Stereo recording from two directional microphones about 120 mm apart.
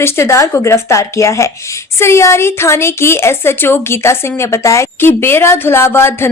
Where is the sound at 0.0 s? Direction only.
20° left (ahead or behind).